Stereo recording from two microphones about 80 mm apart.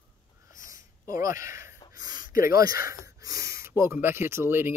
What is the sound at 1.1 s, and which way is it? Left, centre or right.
Speech, right.